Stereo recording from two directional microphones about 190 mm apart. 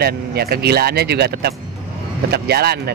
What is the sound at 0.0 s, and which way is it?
Speech, 55° right (ahead or behind).